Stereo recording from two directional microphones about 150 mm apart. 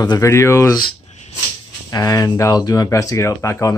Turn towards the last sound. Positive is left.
turn(degrees=20)  # may be behind; listen again after turning